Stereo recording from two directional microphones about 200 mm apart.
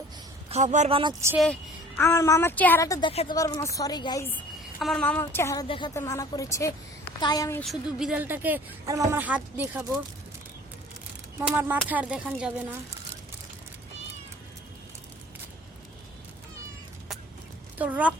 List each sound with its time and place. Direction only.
0.5 s a man's voice: 35° right (ahead or behind)
2.0 s a woman's voice: 15° left (ahead or behind)
3.1 s speech: 30° left (ahead or behind)
3.3 s a woman's voice: 15° left (ahead or behind)
4.8 s a woman's voice: centre (ahead or behind)
5.6 s speech: 25° left (ahead or behind)
5.9 s a woman's voice: 15° left (ahead or behind)
7.6 s speech: centre (ahead or behind)
11.3 s speech: 10° right (ahead or behind)
17.7 s speech: 5° right (ahead or behind)